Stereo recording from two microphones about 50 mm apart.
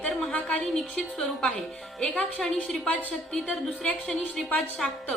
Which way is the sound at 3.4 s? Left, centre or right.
Centre.